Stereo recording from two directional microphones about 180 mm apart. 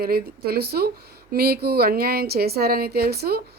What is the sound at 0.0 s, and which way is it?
Speech, 55° right (ahead or behind).